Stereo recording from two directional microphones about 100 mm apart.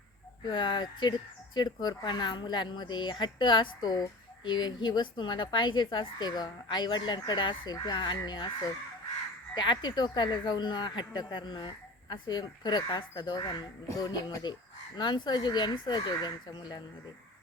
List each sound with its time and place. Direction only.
0.4 s speech: 50° left (ahead or behind)